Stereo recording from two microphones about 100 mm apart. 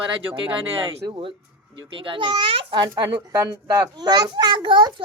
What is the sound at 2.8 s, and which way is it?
A child's voice, 45° right (ahead or behind).